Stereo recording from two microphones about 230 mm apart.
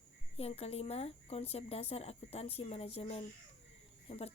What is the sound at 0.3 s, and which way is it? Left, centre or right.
Speech, left.